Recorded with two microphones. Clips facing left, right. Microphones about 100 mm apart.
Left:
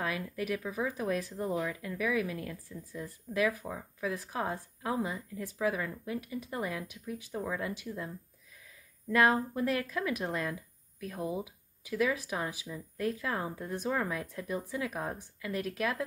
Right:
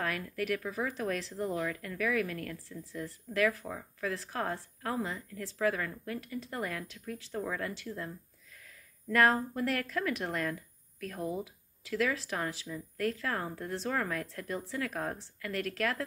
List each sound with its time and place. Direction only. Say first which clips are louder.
0.0 s speech: even; 15° left (ahead or behind)